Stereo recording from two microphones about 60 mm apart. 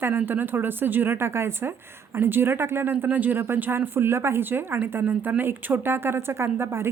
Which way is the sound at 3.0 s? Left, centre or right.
Right.